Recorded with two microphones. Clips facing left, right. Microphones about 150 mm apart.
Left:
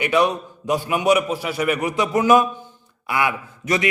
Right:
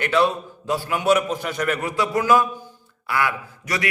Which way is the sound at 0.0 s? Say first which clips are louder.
Left 1 dB; 15° left (ahead or behind).